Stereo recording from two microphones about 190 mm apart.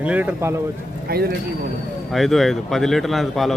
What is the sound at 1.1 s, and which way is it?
Speech, 55° right (ahead or behind).